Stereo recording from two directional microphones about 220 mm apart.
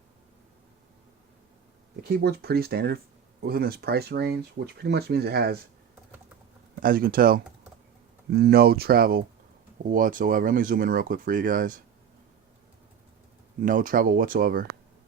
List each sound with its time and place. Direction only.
2.1 s speech: 45° right (ahead or behind)
6.7 s speech: 40° right (ahead or behind)
13.6 s speech: 40° right (ahead or behind)